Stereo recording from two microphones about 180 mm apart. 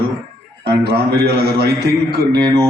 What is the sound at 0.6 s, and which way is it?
Speech, 65° right (ahead or behind).